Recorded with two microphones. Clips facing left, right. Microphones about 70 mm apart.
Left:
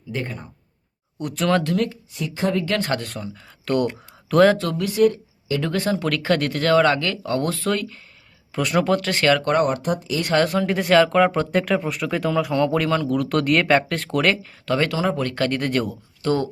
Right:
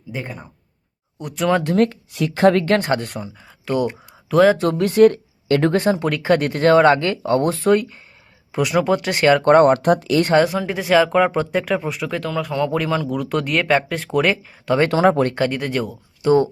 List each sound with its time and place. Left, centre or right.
0.1 s speech: centre
1.7 s speech: right
2.1 s speech: right
2.8 s speech: right
3.4 s speech: centre
4.5 s speech: right
4.8 s speech: right
5.7 s speech: right
8.5 s speech: centre
9.5 s speech: right
10.4 s speech: centre
14.8 s speech: right
15.4 s speech: centre
16.2 s speech: centre